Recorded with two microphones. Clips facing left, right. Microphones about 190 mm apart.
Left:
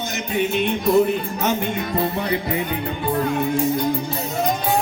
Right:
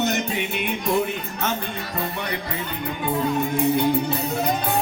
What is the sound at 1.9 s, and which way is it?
Music, 25° left (ahead or behind).